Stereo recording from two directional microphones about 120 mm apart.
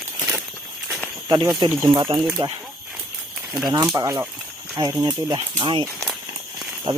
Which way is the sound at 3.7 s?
35° right (ahead or behind).